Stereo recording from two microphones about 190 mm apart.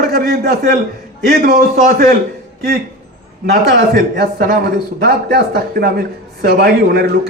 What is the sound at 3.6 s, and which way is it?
Speech, 55° right (ahead or behind).